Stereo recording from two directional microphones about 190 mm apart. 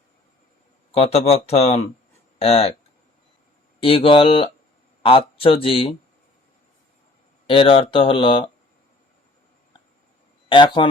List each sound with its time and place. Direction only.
0.9 s speech: 30° left (ahead or behind)
3.8 s speech: 30° left (ahead or behind)
7.4 s speech: 30° left (ahead or behind)
10.5 s speech: 25° left (ahead or behind)